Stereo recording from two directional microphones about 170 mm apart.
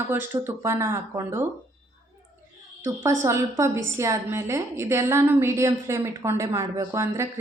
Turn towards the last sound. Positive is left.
turn(degrees=-15)  # may be behind; listen again after turning